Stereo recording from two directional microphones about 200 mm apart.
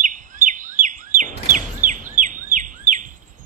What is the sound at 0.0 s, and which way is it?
Bird vocalization, 40° right (ahead or behind).